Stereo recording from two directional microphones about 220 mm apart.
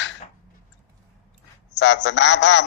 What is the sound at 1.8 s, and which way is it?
Speech, 55° left (ahead or behind).